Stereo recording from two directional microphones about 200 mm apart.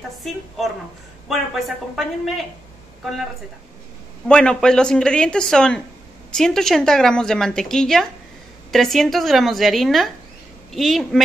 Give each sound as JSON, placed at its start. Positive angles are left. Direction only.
{"t": 1.3, "sound": "a woman's voice", "side_deg": 0}
{"t": 4.3, "sound": "a woman's voice", "side_deg": 5}